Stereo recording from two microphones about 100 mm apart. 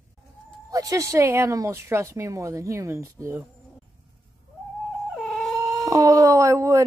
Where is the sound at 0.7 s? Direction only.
35° right (ahead or behind).